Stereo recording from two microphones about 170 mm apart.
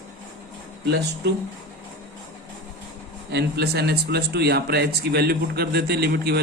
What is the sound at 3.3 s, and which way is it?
Speech, 75° right (ahead or behind).